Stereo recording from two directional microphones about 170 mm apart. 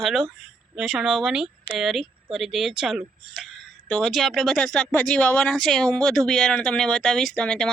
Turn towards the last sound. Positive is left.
turn(degrees=5)  # may be behind; listen again after turning